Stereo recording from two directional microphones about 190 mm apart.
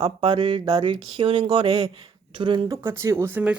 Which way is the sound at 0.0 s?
20° right (ahead or behind).